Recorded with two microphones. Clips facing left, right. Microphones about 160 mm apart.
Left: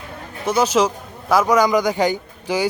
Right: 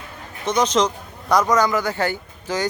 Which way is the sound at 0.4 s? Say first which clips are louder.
Left 2 dB; 5° left (ahead or behind).